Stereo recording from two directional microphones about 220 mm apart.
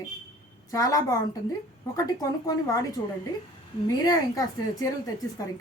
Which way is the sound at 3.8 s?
15° left (ahead or behind).